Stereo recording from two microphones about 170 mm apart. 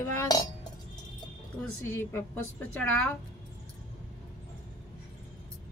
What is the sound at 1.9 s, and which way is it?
A woman's voice, 10° left (ahead or behind).